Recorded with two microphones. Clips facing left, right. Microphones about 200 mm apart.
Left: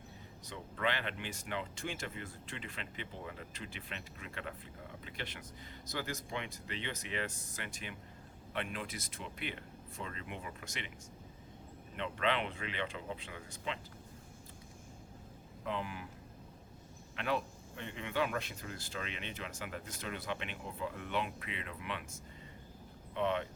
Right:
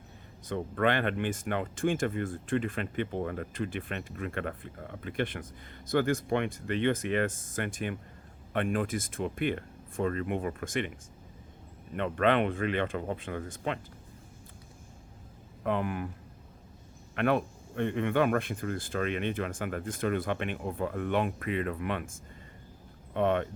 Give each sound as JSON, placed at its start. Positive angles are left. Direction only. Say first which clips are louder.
{"t": 0.4, "sound": "speech", "louder": "right 9 dB", "side_deg": -55}
{"t": 11.9, "sound": "speech", "louder": "right 9 dB", "side_deg": -55}
{"t": 15.6, "sound": "speech", "louder": "right 9 dB", "side_deg": -55}
{"t": 17.2, "sound": "speech", "louder": "right 9 dB", "side_deg": -55}